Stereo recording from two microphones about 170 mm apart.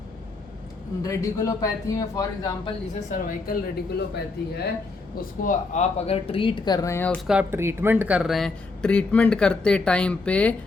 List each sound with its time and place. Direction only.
1.0 s a man's voice: 20° left (ahead or behind)
2.6 s speech: 45° left (ahead or behind)
5.1 s speech: 50° left (ahead or behind); by 7.2 s 10° left (ahead or behind)
7.3 s speech: 10° right (ahead or behind); by 10.5 s 10° left (ahead or behind)